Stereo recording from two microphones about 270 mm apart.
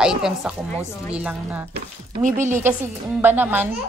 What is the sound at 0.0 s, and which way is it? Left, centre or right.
A woman's voice, centre.